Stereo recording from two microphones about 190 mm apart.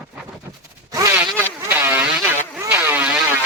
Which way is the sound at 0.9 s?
15° right (ahead or behind).